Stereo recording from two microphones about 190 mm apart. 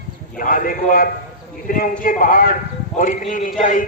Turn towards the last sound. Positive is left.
turn(degrees=45)  # may be behind; listen again after turning